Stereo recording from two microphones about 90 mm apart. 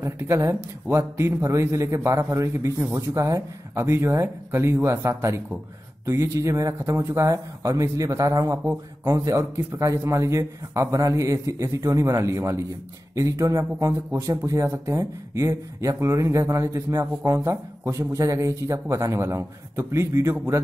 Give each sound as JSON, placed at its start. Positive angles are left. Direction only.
{"t": 0.0, "sound": "a man's voice", "side_deg": -30}